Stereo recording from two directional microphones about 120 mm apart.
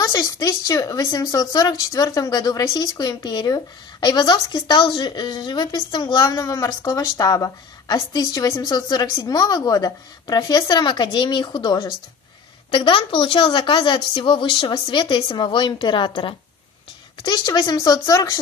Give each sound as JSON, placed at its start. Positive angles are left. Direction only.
{"t": 0.0, "sound": "speech", "side_deg": 30}